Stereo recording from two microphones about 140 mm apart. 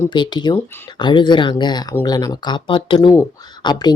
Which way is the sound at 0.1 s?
30° left (ahead or behind).